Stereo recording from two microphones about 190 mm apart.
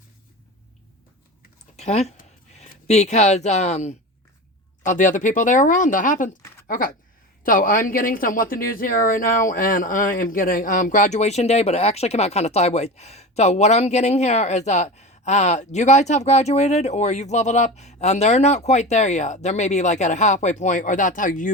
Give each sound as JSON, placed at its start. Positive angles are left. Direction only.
{"t": 1.7, "sound": "speech", "side_deg": 35}